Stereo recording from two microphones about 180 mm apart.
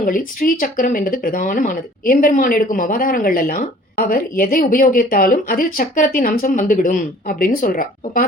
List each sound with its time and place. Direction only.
0.0 s speech: 50° left (ahead or behind)